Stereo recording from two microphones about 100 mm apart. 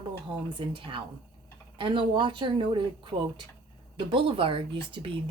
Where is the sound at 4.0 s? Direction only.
60° right (ahead or behind).